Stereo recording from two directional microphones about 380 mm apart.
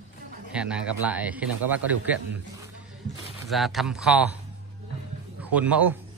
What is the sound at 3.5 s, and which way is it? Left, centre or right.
Speech, centre.